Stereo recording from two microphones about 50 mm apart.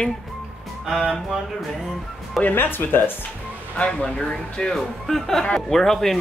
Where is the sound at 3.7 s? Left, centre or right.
Left.